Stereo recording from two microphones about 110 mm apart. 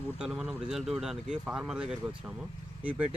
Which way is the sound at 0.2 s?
10° right (ahead or behind).